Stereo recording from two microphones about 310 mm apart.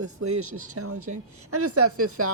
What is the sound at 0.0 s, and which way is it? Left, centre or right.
Speech, right.